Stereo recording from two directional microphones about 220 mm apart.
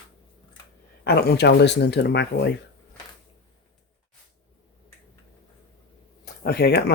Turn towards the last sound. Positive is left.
turn(degrees=50)  # may be behind; listen again after turning